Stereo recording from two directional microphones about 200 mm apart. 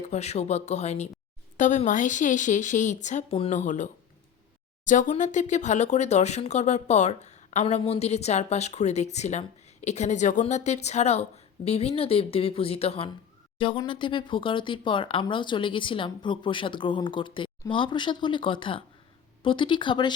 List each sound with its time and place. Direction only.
0.0 s speech: 35° left (ahead or behind)
4.9 s speech: 40° left (ahead or behind); by 20.1 s 20° left (ahead or behind)